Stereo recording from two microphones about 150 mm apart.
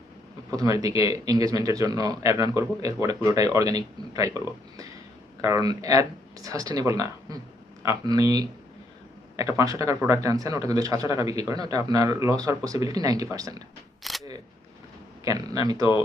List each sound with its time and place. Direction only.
0.5 s speech: 25° right (ahead or behind)
14.0 s single-lens reflex camera: centre (ahead or behind)
15.2 s speech: 25° right (ahead or behind)